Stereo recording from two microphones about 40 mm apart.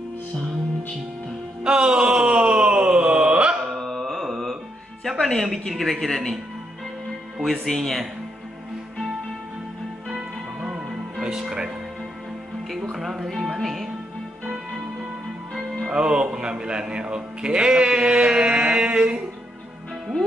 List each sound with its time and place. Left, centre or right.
1.6 s a sound: right
3.7 s carnatic music: centre
5.0 s a woman's voice: centre
7.3 s a woman's voice: centre
10.0 s music: centre
12.9 s music: centre
15.9 s music: right